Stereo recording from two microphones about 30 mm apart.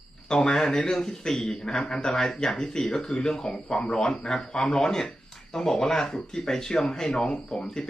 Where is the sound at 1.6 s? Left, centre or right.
Left.